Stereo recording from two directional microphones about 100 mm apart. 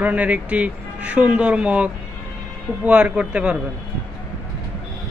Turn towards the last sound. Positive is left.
turn(degrees=-10)  # may be behind; listen again after turning